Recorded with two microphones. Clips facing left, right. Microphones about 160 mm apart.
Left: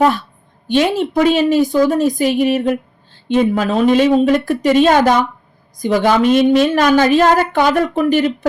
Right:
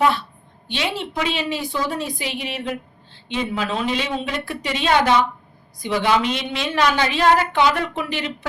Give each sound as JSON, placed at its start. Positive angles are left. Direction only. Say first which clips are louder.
{"t": 0.7, "sound": "a woman's voice", "louder": "left 11 dB", "side_deg": 45}